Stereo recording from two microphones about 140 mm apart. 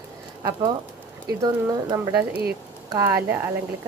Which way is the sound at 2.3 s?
90° right.